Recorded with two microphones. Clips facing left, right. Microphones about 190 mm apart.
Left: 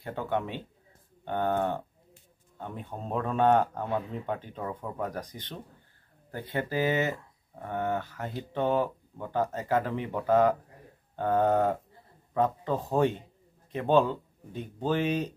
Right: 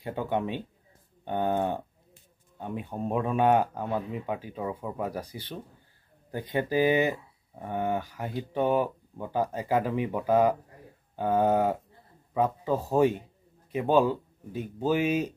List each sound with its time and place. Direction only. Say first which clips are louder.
0.0 s speech: right 2 dB; 15° right (ahead or behind)